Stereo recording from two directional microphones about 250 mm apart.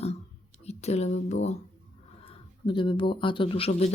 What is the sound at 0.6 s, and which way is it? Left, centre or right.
Speech, left.